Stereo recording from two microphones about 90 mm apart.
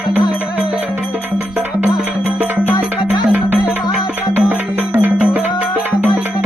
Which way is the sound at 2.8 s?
10° right (ahead or behind).